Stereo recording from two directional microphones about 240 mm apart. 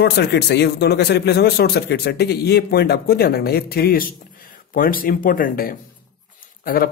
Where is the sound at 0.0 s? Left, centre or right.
Left.